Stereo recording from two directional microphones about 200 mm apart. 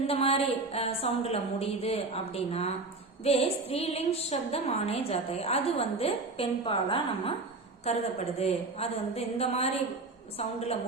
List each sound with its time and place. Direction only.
0.1 s a woman's voice: 30° left (ahead or behind)